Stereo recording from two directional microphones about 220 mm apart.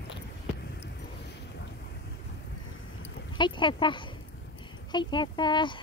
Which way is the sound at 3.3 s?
20° left (ahead or behind).